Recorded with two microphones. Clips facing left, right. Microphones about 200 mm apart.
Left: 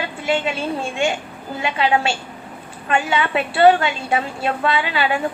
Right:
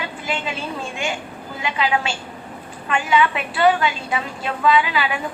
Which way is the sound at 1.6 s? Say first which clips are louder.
Left 3 dB; 25° left (ahead or behind).